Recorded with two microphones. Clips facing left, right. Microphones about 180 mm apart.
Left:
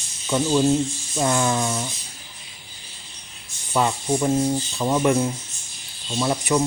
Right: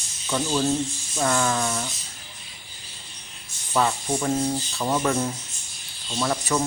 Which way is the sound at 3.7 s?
15° left (ahead or behind).